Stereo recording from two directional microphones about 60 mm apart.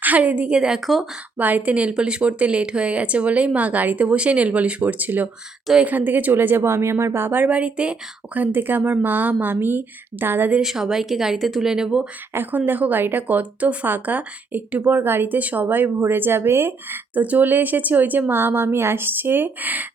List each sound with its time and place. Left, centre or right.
0.0 s speech: right
0.8 s speech: centre
1.4 s speech: right
10.6 s speech: centre
12.3 s speech: right